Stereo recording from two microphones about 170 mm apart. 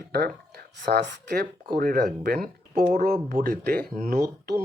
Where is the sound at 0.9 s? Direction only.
70° right (ahead or behind).